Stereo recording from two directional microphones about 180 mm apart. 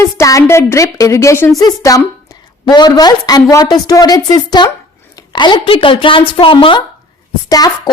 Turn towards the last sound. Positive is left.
turn(degrees=20)  # may be behind; listen again after turning